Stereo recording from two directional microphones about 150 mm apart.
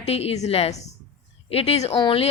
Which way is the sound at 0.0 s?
45° left (ahead or behind).